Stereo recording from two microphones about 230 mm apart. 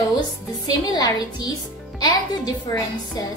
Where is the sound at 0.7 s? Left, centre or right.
Centre.